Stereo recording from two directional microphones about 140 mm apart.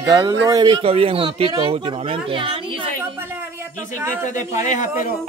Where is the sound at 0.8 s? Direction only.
45° right (ahead or behind).